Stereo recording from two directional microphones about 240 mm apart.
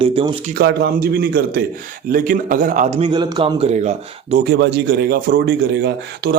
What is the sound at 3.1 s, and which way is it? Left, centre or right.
Speech, centre.